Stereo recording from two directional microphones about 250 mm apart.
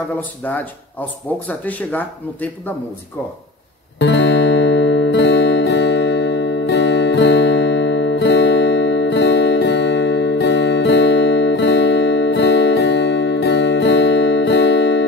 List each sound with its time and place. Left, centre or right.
1.5 s speech: centre
4.0 s music: left